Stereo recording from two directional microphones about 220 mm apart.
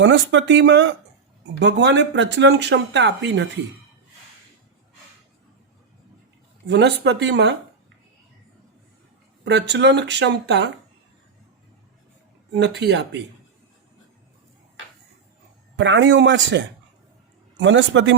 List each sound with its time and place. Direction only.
0.0 s speech: 55° right (ahead or behind)
6.7 s speech: 50° right (ahead or behind)
9.4 s speech: 50° right (ahead or behind)
12.5 s speech: 50° right (ahead or behind)
15.7 s a man's voice: 55° right (ahead or behind)